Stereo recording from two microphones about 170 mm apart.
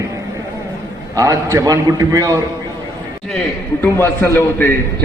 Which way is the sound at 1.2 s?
20° right (ahead or behind).